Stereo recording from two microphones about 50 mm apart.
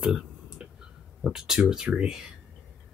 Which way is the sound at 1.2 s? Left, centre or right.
Centre.